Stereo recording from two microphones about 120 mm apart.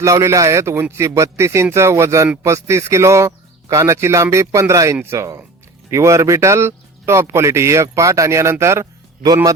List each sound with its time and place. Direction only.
0.0 s speech: 25° right (ahead or behind)